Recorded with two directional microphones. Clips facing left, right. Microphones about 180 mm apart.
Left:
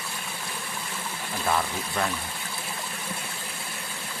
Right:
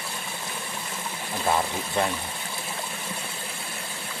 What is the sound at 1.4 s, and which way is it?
Speech, 25° right (ahead or behind).